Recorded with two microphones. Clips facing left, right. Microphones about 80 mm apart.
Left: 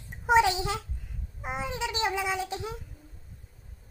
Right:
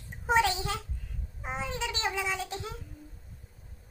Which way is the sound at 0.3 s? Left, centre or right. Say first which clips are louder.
Left 4 dB; centre.